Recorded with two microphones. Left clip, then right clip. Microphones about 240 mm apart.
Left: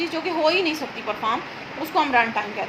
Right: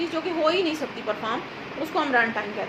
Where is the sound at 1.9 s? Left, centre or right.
Left.